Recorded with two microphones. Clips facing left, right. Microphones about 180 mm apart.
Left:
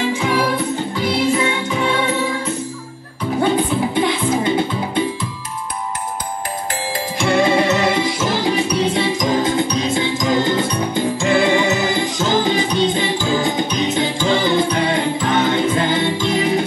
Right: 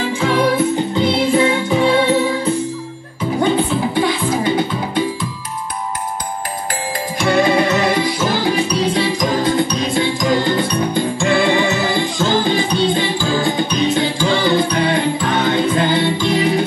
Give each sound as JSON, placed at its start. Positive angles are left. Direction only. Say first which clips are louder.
{"t": 0.1, "sound": "music", "louder": "right 2 dB", "side_deg": 15}
{"t": 0.9, "sound": "music", "louder": "right 2 dB", "side_deg": -30}
{"t": 3.9, "sound": "music", "louder": "even", "side_deg": 25}
{"t": 7.2, "sound": "music", "louder": "right 1 dB", "side_deg": 25}